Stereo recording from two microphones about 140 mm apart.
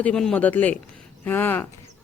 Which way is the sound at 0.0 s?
5° left (ahead or behind).